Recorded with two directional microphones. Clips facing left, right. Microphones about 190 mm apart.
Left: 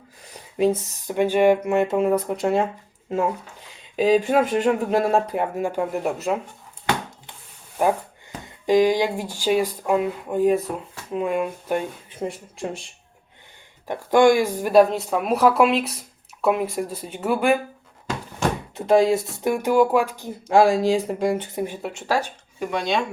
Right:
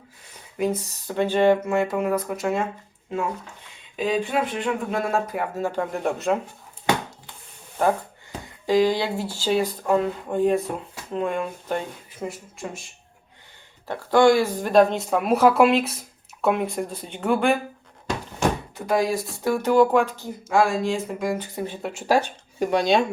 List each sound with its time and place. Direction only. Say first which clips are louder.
0.6 s speech: left 4 dB; 25° left (ahead or behind)
3.9 s speech: left 6 dB; 40° left (ahead or behind)
5.5 s speech: left 2 dB; 10° left (ahead or behind)
7.8 s speech: left 1 dB; 10° left (ahead or behind)
12.2 s speech: left 3 dB; 25° left (ahead or behind)
13.8 s speech: left 1 dB; 15° left (ahead or behind)
18.8 s speech: left 6 dB; 25° left (ahead or behind)
20.5 s speech: left 4 dB; 35° left (ahead or behind)
21.8 s speech: even; centre (ahead or behind)
22.6 s speech: right 4 dB; 35° right (ahead or behind)